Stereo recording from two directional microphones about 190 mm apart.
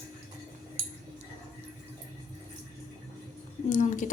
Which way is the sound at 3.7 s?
45° left (ahead or behind).